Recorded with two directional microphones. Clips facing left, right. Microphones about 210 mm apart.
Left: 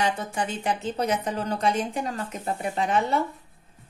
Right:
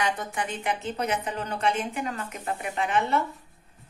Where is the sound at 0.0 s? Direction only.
30° left (ahead or behind).